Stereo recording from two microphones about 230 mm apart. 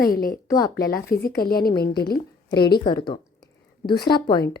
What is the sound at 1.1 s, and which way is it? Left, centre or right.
Speech, left.